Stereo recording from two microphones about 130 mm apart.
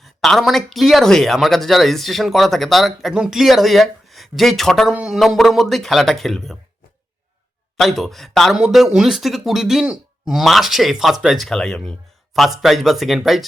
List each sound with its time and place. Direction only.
0.0 s speech: centre (ahead or behind)
7.8 s speech: centre (ahead or behind)